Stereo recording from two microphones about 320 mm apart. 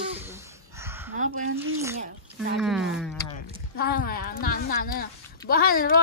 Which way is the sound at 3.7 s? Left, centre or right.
Left.